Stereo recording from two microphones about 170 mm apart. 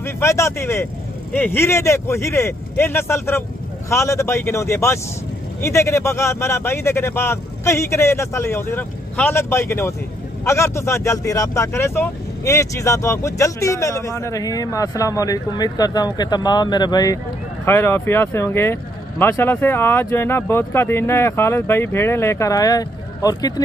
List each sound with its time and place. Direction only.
0.0 s speech: 15° left (ahead or behind)